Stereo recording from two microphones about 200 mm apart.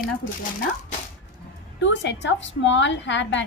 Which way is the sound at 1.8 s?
65° left (ahead or behind).